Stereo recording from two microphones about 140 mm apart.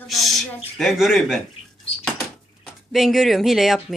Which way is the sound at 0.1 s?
Centre (ahead or behind).